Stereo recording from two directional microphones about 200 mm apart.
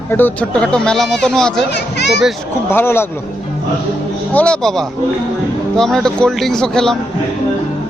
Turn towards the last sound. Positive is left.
turn(degrees=5)  # may be behind; listen again after turning